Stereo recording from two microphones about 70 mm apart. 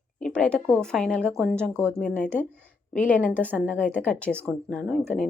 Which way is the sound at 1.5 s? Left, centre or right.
Centre.